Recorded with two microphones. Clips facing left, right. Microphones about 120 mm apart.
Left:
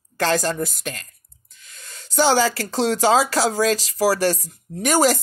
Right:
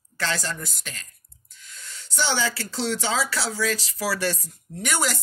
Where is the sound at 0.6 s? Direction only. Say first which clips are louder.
Left 11 dB; 50° left (ahead or behind).